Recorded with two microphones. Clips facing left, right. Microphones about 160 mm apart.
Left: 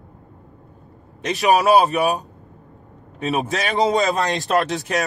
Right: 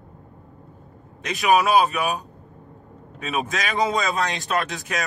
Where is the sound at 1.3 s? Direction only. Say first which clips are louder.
Left 3 dB; 35° left (ahead or behind).